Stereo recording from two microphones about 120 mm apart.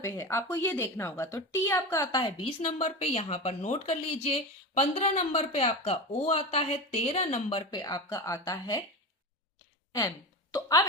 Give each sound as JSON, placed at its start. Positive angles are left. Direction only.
{"t": 0.0, "sound": "speech", "side_deg": 25}
{"t": 2.2, "sound": "speech", "side_deg": 50}
{"t": 7.7, "sound": "speech", "side_deg": 30}
{"t": 10.5, "sound": "a woman's voice", "side_deg": 30}